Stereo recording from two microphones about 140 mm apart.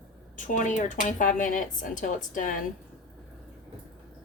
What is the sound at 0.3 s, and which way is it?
Speech, 65° left (ahead or behind).